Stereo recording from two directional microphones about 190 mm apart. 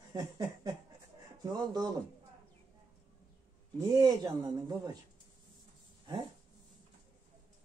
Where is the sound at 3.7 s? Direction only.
20° right (ahead or behind).